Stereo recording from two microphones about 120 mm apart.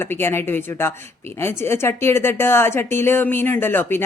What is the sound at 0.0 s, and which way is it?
A woman's voice, 20° left (ahead or behind).